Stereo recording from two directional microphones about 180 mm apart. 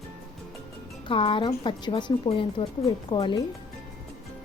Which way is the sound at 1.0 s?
30° left (ahead or behind).